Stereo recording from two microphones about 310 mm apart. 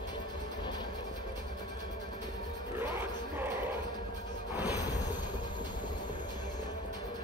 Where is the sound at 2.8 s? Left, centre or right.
Centre.